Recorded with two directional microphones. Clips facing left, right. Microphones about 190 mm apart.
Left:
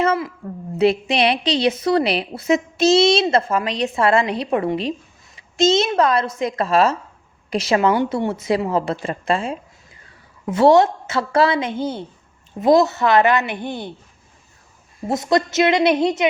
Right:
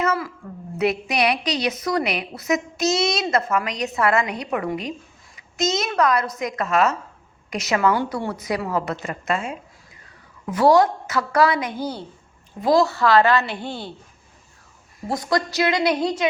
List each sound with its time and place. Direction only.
0.0 s a sound: 25° left (ahead or behind)
0.8 s a woman's voice: 30° left (ahead or behind)
15.0 s a woman's voice: 20° left (ahead or behind)